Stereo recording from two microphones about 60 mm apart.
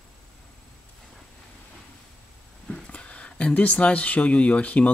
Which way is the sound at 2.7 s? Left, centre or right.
Centre.